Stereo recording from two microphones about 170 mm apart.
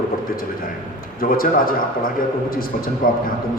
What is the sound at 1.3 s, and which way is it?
A man's voice, 55° left (ahead or behind).